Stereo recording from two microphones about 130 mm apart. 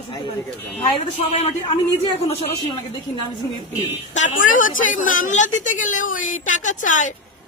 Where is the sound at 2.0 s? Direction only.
50° left (ahead or behind).